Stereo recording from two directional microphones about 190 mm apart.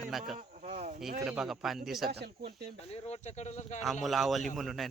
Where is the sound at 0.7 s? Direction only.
45° right (ahead or behind).